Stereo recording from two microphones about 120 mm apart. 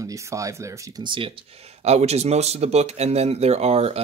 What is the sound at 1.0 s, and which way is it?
Speech, 45° right (ahead or behind).